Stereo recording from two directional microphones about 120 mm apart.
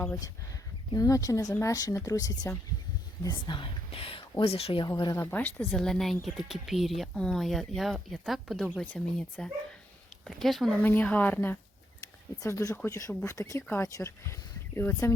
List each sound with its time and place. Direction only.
0.9 s speech: 30° left (ahead or behind)
3.2 s speech: 40° left (ahead or behind)
4.9 s speech: 35° left (ahead or behind)
5.1 s speech: 20° left (ahead or behind); by 10.8 s centre (ahead or behind)
10.8 s speech: 15° left (ahead or behind)
12.4 s speech: 25° left (ahead or behind)